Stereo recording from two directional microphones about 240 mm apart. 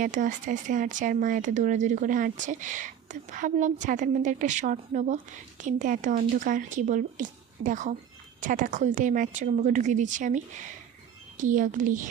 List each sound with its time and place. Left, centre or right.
0.0 s speech: right